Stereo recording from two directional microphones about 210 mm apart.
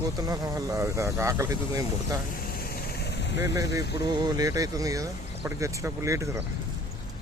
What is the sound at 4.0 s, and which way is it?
Speech, 20° right (ahead or behind).